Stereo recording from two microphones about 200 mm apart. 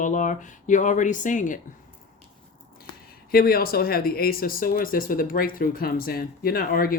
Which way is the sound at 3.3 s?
50° left (ahead or behind).